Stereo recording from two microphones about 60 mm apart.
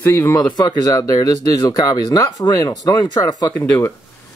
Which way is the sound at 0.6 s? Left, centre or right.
Left.